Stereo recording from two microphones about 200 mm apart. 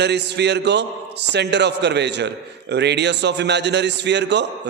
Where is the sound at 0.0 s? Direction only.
55° right (ahead or behind).